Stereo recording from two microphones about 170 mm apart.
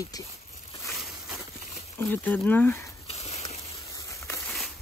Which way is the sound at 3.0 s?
35° left (ahead or behind).